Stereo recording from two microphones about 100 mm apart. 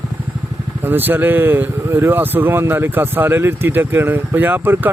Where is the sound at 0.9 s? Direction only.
20° right (ahead or behind).